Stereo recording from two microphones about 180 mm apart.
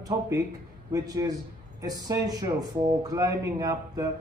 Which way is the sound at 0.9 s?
20° right (ahead or behind).